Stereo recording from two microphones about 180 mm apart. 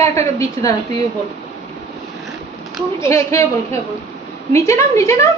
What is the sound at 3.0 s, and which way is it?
A woman's voice, 15° left (ahead or behind).